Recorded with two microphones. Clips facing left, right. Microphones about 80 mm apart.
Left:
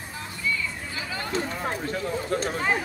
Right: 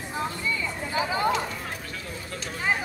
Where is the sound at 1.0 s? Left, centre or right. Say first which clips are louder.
Right 8 dB; right.